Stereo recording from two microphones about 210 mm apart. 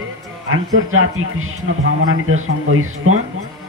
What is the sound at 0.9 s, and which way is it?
Speech, 80° right.